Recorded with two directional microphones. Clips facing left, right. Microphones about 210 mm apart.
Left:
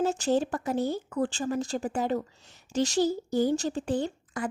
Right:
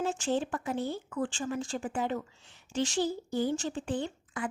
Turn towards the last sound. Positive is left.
turn(degrees=40)  # may be behind; listen again after turning